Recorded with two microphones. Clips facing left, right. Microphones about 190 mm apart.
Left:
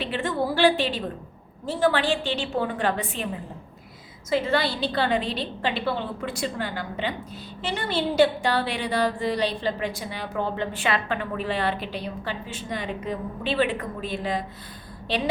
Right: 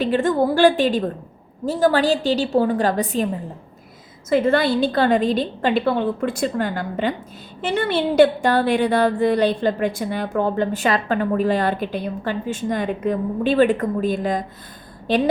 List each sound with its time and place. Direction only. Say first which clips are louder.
0.0 s a woman's voice: right 8 dB; 45° right (ahead or behind)
4.3 s a woman's voice: right 7 dB; 50° right (ahead or behind)